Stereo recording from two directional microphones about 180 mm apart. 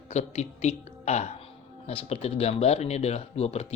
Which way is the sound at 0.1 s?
40° left (ahead or behind).